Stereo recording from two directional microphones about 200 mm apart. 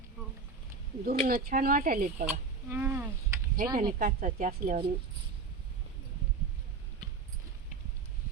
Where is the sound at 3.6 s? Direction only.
45° right (ahead or behind).